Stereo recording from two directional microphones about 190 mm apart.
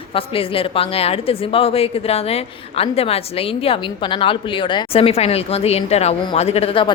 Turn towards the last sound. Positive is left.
turn(degrees=30)  # may be behind; listen again after turning